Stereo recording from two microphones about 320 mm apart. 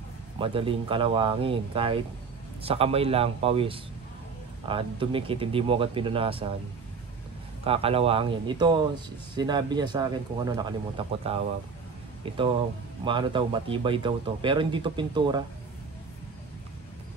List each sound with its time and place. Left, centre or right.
0.4 s a man's voice: centre
7.6 s a man's voice: centre
13.0 s a man's voice: centre